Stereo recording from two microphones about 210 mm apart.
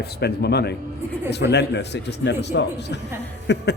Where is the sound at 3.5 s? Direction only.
55° left (ahead or behind).